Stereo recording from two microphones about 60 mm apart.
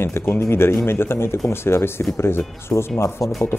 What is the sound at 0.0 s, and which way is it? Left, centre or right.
Speech, left.